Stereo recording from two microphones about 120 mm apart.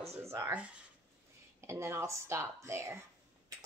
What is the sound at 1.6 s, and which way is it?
Speech, 25° right (ahead or behind).